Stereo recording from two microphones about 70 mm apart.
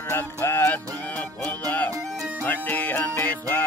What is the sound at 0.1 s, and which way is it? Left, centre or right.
Music, left.